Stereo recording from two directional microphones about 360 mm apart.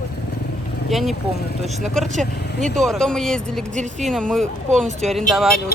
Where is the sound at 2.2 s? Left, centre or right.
Centre.